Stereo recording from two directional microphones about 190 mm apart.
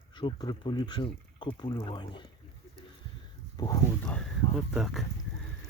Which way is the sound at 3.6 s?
20° left (ahead or behind).